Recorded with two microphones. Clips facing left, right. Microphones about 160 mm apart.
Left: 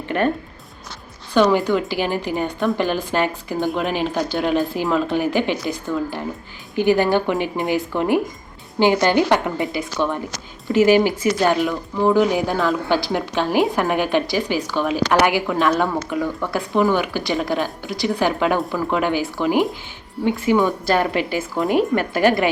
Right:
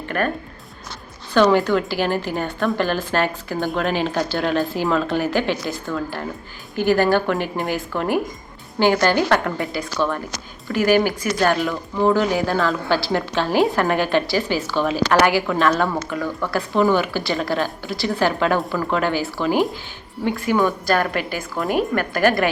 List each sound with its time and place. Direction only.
1.3 s a woman's voice: 10° left (ahead or behind)
11.7 s speech: 5° left (ahead or behind)
12.1 s a woman's voice: 15° left (ahead or behind)